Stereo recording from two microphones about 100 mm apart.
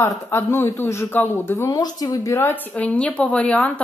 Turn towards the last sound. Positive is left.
turn(degrees=10)  # may be behind; listen again after turning